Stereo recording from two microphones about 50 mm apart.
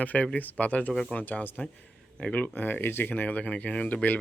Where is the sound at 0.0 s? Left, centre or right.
Left.